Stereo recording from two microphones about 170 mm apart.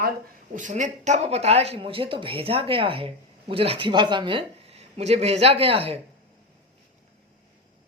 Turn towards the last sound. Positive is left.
turn(degrees=-35)  # may be behind; listen again after turning